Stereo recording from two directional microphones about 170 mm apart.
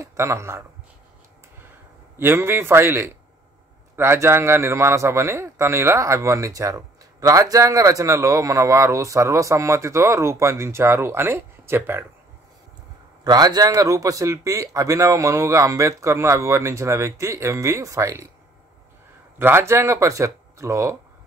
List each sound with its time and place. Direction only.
0.0 s speech: 15° right (ahead or behind)
2.1 s a man's voice: 15° right (ahead or behind)
13.2 s a man's voice: 25° right (ahead or behind)
19.3 s a man's voice: 15° right (ahead or behind)